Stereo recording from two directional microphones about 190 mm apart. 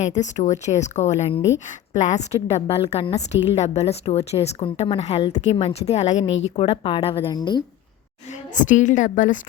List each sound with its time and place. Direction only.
0.0 s a woman's voice: 40° left (ahead or behind); by 7.6 s 20° left (ahead or behind)
8.5 s a woman's voice: 40° left (ahead or behind)